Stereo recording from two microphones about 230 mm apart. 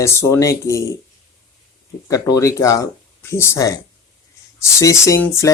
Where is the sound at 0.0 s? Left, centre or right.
Centre.